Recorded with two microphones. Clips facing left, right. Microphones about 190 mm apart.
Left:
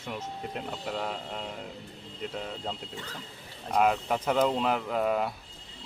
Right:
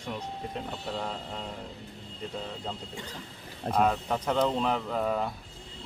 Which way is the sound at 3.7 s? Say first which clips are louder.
Left 1 dB; 10° left (ahead or behind).